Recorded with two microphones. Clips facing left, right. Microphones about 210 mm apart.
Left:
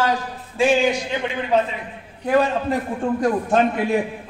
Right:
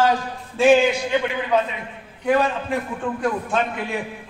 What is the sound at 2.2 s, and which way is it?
A man's voice, 35° left (ahead or behind).